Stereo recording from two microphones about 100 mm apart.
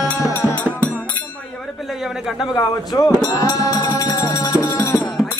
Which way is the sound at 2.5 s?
40° left (ahead or behind).